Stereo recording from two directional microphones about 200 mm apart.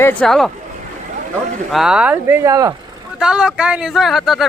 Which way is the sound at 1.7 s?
5° right (ahead or behind).